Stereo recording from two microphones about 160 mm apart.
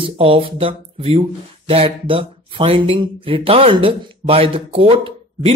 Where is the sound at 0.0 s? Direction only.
35° right (ahead or behind).